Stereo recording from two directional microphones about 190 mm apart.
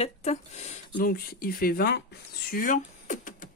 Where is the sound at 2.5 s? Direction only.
45° left (ahead or behind).